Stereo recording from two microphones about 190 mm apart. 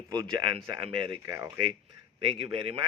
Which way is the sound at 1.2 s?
15° right (ahead or behind).